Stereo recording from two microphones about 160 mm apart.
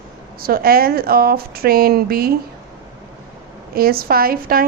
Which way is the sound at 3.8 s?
70° right (ahead or behind).